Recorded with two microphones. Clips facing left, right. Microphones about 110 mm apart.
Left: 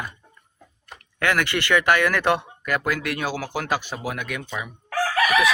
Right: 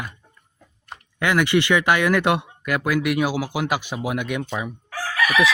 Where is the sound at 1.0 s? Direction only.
15° right (ahead or behind).